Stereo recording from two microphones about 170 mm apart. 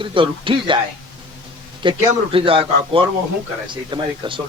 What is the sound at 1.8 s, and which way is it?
A man's voice, 30° right (ahead or behind).